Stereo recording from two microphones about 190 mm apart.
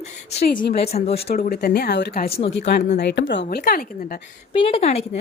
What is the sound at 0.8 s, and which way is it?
Speech, 35° left (ahead or behind).